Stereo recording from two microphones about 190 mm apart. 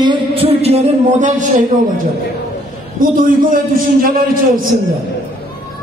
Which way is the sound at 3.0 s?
45° right (ahead or behind).